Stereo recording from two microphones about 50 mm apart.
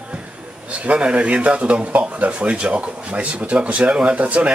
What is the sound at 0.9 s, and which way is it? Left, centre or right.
Speech, right.